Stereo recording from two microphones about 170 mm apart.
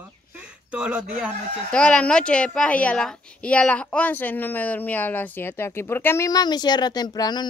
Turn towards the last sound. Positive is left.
turn(degrees=25)  # may be behind; listen again after turning